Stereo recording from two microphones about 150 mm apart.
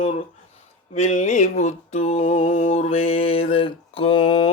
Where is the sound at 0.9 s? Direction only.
50° left (ahead or behind).